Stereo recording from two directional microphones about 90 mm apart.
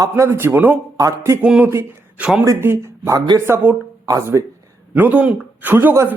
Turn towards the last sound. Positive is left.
turn(degrees=-20)  # may be behind; listen again after turning